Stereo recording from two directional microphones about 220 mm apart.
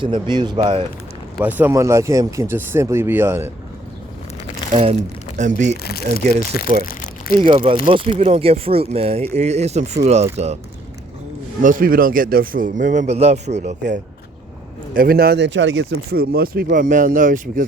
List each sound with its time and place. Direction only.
0.0 s speech: 20° right (ahead or behind)
1.4 s speech: 10° right (ahead or behind)
4.7 s speech: 30° right (ahead or behind)
5.8 s speech: 45° left (ahead or behind)
7.3 s speech: 25° right (ahead or behind)
11.6 s speech: 40° right (ahead or behind)
13.5 s speech: 45° right (ahead or behind)